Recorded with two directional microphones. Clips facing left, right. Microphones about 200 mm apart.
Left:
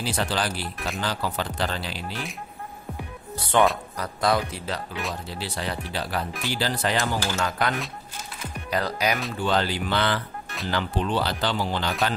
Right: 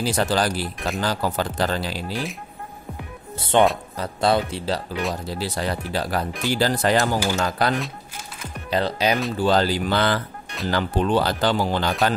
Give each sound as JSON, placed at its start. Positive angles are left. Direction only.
{"t": 0.0, "sound": "speech", "side_deg": -45}
{"t": 3.3, "sound": "speech", "side_deg": -25}
{"t": 5.2, "sound": "speech", "side_deg": -40}
{"t": 7.3, "sound": "speech", "side_deg": -35}